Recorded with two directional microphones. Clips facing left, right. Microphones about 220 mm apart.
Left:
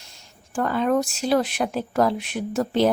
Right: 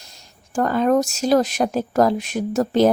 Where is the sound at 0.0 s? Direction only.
40° right (ahead or behind).